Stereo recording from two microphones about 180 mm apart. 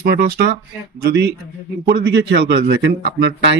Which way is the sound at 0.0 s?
55° right (ahead or behind).